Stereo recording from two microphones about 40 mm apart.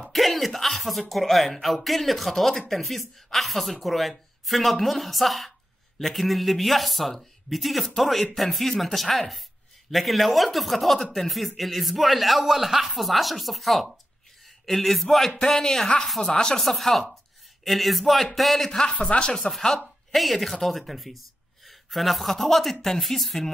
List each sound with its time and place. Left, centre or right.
0.0 s speech: centre
16.5 s speech: centre
18.7 s speech: centre
19.6 s speech: centre